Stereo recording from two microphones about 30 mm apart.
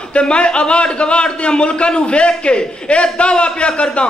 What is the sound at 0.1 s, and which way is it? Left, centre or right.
A man's voice, left.